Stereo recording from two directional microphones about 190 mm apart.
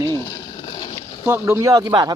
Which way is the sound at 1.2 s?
10° right (ahead or behind).